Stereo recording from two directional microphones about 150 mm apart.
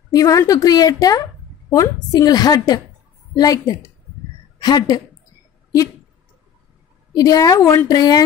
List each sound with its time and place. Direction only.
0.1 s a woman's voice: 20° left (ahead or behind)
7.2 s a woman's voice: 25° left (ahead or behind)